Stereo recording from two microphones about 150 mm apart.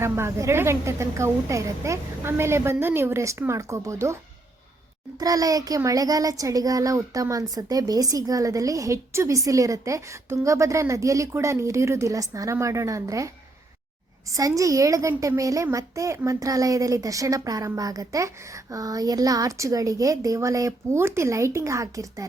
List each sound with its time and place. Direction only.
0.0 s a woman's voice: 20° right (ahead or behind)
5.2 s a child's voice: 25° right (ahead or behind)
14.3 s a child's voice: 20° right (ahead or behind)